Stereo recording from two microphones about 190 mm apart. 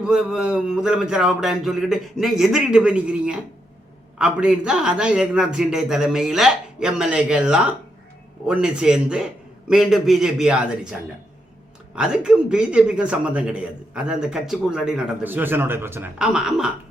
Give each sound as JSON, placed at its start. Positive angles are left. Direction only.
{"t": 0.0, "sound": "a man's voice", "side_deg": -5}
{"t": 11.9, "sound": "a man's voice", "side_deg": -5}